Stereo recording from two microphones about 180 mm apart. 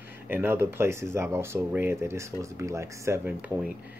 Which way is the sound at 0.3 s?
15° right (ahead or behind).